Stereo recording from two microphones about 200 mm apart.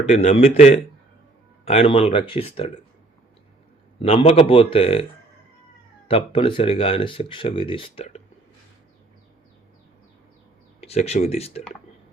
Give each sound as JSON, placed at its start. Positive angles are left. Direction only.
{"t": 0.0, "sound": "speech", "side_deg": 30}
{"t": 4.0, "sound": "speech", "side_deg": 30}
{"t": 6.1, "sound": "speech", "side_deg": 30}
{"t": 10.8, "sound": "speech", "side_deg": 30}